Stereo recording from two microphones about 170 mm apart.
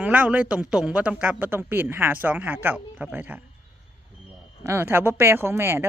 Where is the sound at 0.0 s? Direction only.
10° right (ahead or behind).